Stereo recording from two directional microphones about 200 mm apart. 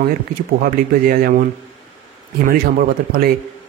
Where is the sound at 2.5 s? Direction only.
45° right (ahead or behind).